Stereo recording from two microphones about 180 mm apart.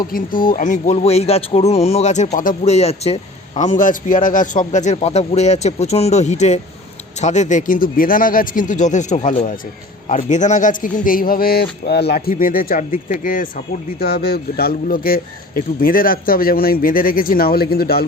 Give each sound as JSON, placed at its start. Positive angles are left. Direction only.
{"t": 0.1, "sound": "speech", "side_deg": 50}
{"t": 14.0, "sound": "speech", "side_deg": 60}